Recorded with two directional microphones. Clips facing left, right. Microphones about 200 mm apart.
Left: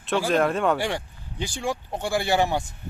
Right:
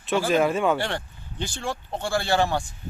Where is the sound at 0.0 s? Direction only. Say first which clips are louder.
Right 1 dB; centre (ahead or behind).